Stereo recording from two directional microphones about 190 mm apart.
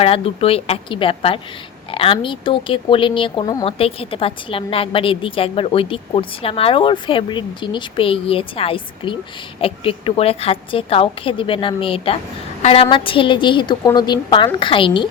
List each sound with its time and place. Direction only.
0.0 s speech: 30° left (ahead or behind)